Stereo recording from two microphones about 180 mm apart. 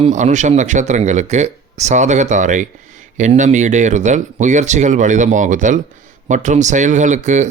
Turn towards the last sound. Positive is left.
turn(degrees=-40)  # may be behind; listen again after turning